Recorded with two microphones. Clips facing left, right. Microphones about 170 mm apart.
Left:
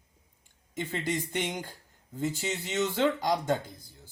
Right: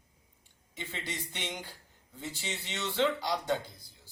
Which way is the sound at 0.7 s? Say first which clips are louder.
Left 9 dB; 45° left (ahead or behind).